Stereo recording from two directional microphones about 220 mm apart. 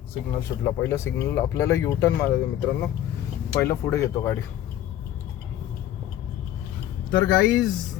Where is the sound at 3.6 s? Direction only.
15° left (ahead or behind).